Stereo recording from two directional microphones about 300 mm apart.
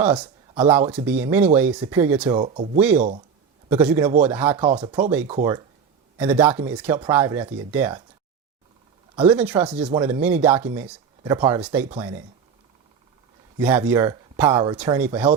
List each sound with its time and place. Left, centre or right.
0.0 s speech: centre
0.5 s speech: centre
0.9 s speech: centre
2.4 s speech: right
3.7 s speech: centre
9.1 s speech: centre
13.6 s speech: centre